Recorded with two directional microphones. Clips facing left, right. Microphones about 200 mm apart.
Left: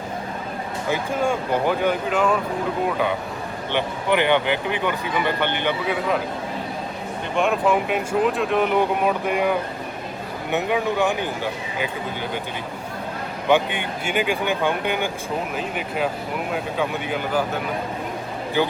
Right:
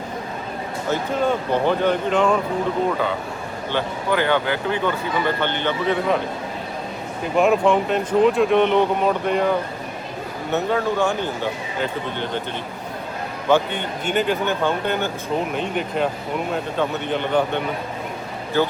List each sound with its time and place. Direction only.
0.9 s speech: 10° left (ahead or behind)
3.7 s speech: 20° left (ahead or behind)
7.3 s speech: centre (ahead or behind)
13.5 s speech: 15° left (ahead or behind)